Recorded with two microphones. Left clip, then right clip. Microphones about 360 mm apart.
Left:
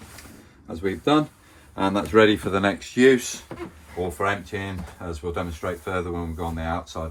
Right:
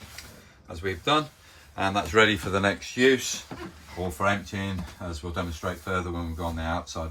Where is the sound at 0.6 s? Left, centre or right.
Centre.